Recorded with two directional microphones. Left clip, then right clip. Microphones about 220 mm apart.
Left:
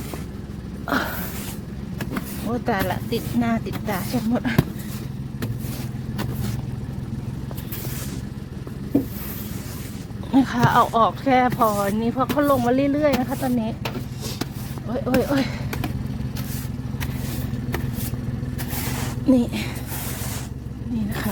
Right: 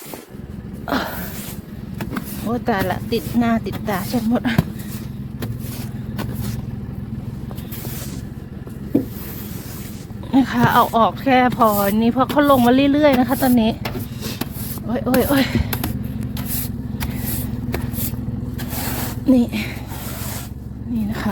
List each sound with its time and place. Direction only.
0.9 s speech: 5° right (ahead or behind)
2.0 s speech: 20° right (ahead or behind)
10.3 s speech: 5° right (ahead or behind); by 13.7 s 25° right (ahead or behind)
14.8 s speech: 10° right (ahead or behind)
19.2 s speech: centre (ahead or behind)